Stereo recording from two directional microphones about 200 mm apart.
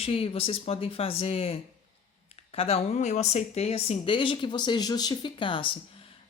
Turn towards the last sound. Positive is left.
turn(degrees=25)  # may be behind; listen again after turning